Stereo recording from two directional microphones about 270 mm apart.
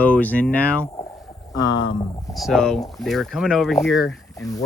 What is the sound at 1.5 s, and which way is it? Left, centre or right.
Speech, left.